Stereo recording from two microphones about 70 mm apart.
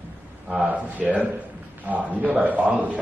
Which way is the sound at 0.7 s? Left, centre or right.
Right.